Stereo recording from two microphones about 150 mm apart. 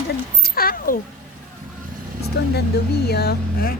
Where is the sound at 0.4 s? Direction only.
90° left.